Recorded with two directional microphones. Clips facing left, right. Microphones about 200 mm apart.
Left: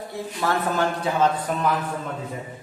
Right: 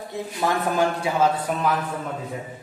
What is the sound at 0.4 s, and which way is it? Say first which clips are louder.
A man's voice: right 1 dB; 15° right (ahead or behind).